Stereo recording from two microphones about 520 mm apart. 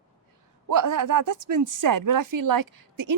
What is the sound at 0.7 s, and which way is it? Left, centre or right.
A woman's voice, right.